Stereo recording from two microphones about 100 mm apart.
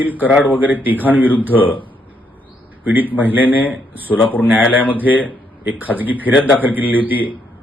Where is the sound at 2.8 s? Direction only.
15° right (ahead or behind).